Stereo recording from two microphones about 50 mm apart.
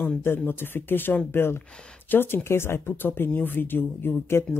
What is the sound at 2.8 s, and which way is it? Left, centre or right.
Speech, left.